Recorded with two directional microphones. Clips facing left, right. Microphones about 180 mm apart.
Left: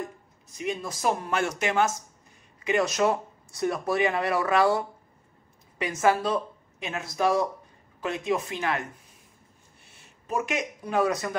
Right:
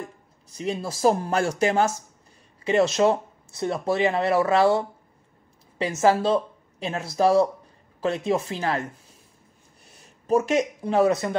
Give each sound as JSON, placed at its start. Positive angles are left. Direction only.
{"t": 0.6, "sound": "speech", "side_deg": -35}
{"t": 9.8, "sound": "speech", "side_deg": -40}